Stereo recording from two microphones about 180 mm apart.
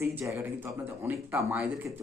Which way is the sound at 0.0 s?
15° right (ahead or behind).